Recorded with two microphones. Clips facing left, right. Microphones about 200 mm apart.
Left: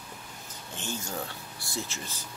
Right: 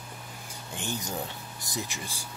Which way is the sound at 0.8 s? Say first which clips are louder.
Right 2 dB; 15° right (ahead or behind).